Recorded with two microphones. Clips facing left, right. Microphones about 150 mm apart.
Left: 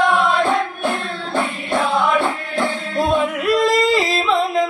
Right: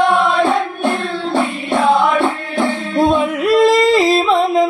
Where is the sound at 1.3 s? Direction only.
25° right (ahead or behind).